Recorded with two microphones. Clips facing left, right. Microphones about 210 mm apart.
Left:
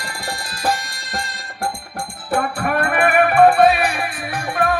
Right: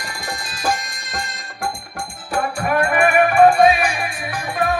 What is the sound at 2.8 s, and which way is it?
Music, 60° left (ahead or behind).